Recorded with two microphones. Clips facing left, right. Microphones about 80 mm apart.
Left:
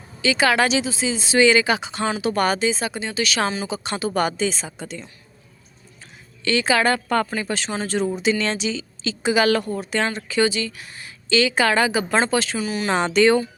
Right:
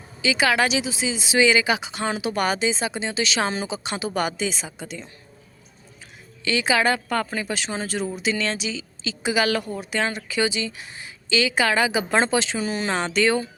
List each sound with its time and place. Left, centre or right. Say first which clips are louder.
0.2 s speech: left 2 dB; centre
6.4 s a woman's voice: left 2 dB; centre
10.5 s speech: left 2 dB; centre
11.3 s a woman's voice: left 3 dB; centre
12.1 s speech: right 1 dB; centre
12.5 s speech: left 1 dB; right
12.9 s a woman's voice: left 6 dB; centre